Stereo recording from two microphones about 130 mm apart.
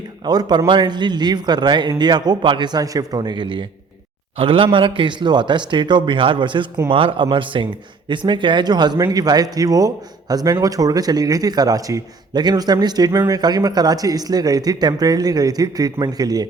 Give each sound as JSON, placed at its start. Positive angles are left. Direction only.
{"t": 0.3, "sound": "a man's voice", "side_deg": -35}